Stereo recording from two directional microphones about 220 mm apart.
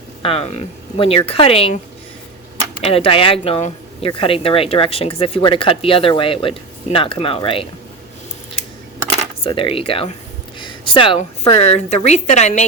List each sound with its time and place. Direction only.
0.2 s speech: 25° left (ahead or behind)
2.8 s speech: 25° left (ahead or behind)
9.4 s a woman's voice: 25° left (ahead or behind)